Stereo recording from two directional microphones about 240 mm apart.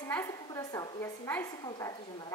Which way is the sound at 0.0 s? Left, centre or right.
Centre.